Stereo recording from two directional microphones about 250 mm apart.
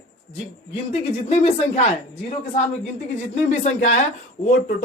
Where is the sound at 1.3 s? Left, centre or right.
Left.